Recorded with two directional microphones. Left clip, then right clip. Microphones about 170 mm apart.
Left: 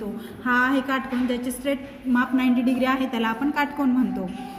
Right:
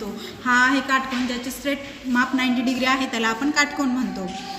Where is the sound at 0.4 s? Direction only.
45° left (ahead or behind).